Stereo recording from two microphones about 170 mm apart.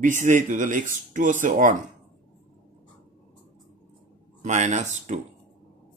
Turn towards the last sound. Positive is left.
turn(degrees=-45)  # may be behind; listen again after turning